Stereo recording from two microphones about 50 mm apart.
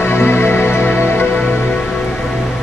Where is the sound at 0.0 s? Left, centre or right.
Left.